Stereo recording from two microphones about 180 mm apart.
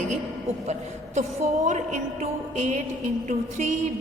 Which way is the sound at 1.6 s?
40° right (ahead or behind).